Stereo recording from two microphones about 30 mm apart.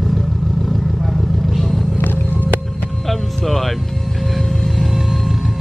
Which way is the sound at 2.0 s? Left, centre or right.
Left.